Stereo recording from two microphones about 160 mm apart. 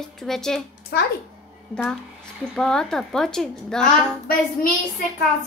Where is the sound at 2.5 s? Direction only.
Centre (ahead or behind).